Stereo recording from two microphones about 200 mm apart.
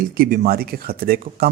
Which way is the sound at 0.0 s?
45° right (ahead or behind).